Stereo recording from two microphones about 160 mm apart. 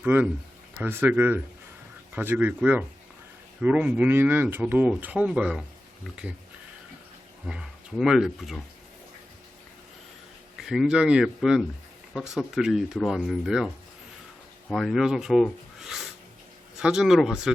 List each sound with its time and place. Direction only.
0.0 s speech: 10° right (ahead or behind)
7.4 s speech: 5° right (ahead or behind)
10.6 s speech: centre (ahead or behind)
14.7 s speech: centre (ahead or behind)